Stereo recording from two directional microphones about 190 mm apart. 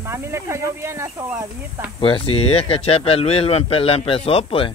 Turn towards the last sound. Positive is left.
turn(degrees=30)  # may be behind; listen again after turning